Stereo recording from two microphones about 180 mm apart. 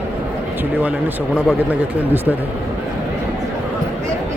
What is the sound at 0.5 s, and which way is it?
Speech, 10° right (ahead or behind).